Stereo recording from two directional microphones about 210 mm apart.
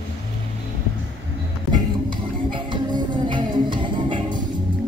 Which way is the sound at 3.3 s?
20° right (ahead or behind).